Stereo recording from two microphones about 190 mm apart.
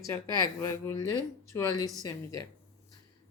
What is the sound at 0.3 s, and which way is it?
Speech, 20° right (ahead or behind).